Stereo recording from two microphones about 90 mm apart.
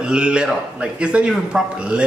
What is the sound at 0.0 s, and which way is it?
A woman's voice, 10° right (ahead or behind).